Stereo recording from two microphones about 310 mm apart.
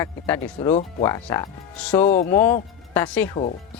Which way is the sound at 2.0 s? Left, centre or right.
Left.